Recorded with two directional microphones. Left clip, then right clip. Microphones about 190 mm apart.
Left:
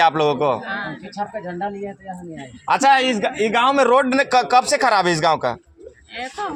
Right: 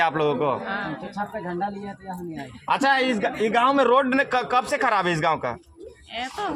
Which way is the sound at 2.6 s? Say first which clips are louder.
Left 6 dB; 50° left (ahead or behind).